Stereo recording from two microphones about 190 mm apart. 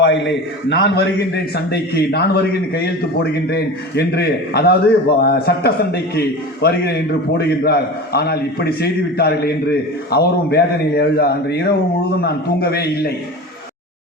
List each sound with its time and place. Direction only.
0.0 s a man's voice: 70° left (ahead or behind)
1.5 s a man's voice: 55° left (ahead or behind)